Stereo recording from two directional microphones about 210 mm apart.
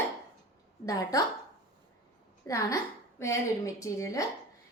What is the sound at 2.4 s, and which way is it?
A woman's voice, 15° left (ahead or behind).